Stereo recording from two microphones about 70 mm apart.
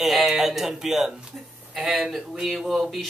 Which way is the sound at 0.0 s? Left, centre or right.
Centre.